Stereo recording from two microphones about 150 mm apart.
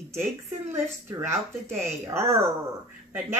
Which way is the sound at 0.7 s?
15° right (ahead or behind).